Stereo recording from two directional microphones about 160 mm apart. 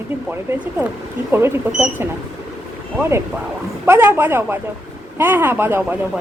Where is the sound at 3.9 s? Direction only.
15° right (ahead or behind).